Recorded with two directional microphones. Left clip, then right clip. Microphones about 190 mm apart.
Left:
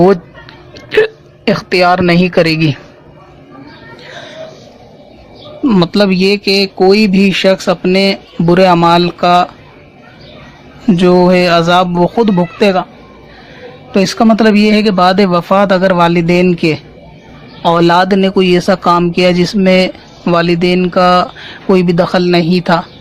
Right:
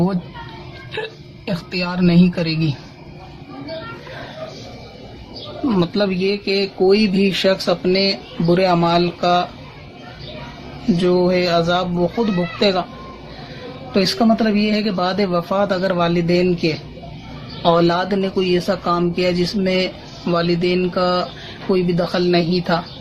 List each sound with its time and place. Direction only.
0.9 s a woman's voice: 45° left (ahead or behind)
5.6 s speech: 50° left (ahead or behind)
10.9 s speech: 55° left (ahead or behind)
13.9 s speech: 50° left (ahead or behind)